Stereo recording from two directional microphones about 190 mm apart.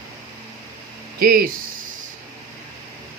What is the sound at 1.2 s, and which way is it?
Speech, 50° right (ahead or behind).